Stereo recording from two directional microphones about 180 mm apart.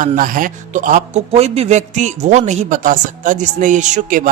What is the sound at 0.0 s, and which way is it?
A woman's voice, 50° right (ahead or behind).